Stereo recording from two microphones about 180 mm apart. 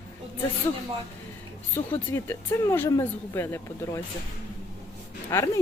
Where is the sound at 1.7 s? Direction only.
10° left (ahead or behind).